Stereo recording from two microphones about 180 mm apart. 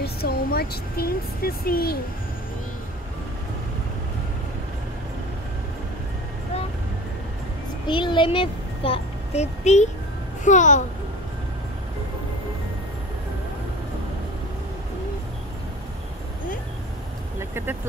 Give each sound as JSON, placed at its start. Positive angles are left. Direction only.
{"t": 0.0, "sound": "speech", "side_deg": 60}
{"t": 7.8, "sound": "a child's voice", "side_deg": 25}
{"t": 17.4, "sound": "vehicle", "side_deg": -15}